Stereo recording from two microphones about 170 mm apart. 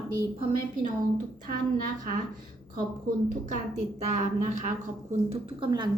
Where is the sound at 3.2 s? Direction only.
45° right (ahead or behind).